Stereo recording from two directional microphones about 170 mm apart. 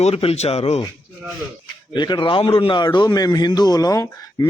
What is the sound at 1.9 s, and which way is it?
A man's voice, 25° left (ahead or behind).